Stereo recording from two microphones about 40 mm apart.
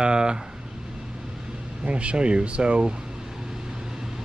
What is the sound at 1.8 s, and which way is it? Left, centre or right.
Speech, right.